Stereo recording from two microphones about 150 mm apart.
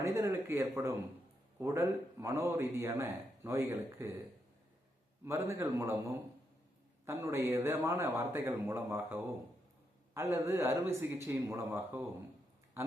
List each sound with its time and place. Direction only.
0.0 s a man's voice: 20° right (ahead or behind)
5.2 s a man's voice: 20° right (ahead or behind)